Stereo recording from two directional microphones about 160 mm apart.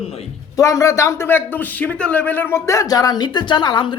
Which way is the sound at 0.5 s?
20° left (ahead or behind).